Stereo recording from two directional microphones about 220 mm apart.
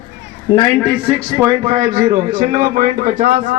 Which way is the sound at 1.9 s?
30° right (ahead or behind).